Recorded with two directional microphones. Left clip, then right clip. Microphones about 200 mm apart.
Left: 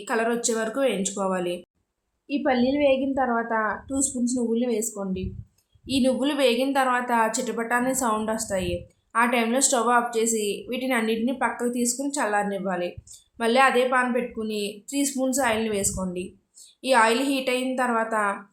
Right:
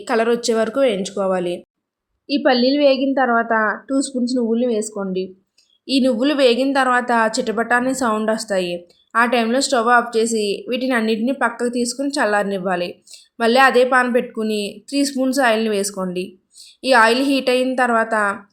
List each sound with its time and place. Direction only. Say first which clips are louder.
0.0 s a woman's voice: right 7 dB; 30° right (ahead or behind)